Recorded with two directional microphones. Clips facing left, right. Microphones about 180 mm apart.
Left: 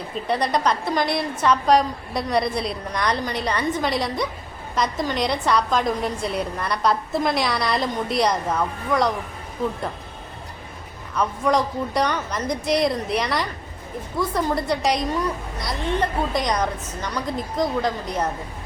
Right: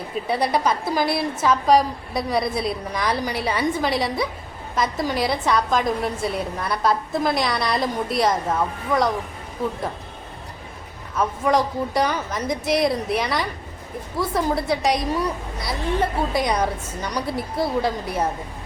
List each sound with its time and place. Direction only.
0.3 s a woman's voice: 5° right (ahead or behind)
11.1 s a woman's voice: centre (ahead or behind)